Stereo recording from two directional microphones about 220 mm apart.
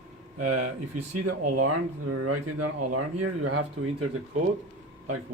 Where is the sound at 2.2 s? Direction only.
90° right.